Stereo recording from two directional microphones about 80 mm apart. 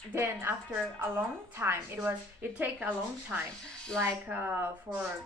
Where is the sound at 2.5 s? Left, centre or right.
Centre.